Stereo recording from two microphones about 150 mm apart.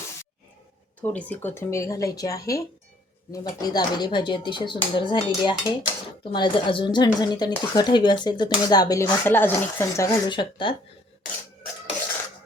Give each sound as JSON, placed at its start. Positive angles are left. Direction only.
{"t": 1.0, "sound": "speech", "side_deg": 10}